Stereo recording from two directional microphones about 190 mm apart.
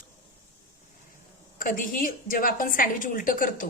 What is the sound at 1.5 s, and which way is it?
A woman's voice, 45° left (ahead or behind).